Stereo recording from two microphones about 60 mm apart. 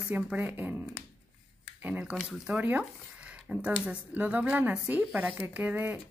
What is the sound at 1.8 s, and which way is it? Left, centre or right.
Speech, right.